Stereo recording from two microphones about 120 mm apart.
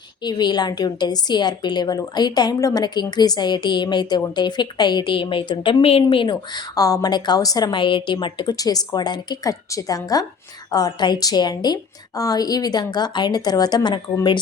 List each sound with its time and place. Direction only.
0.2 s a woman's voice: 35° left (ahead or behind)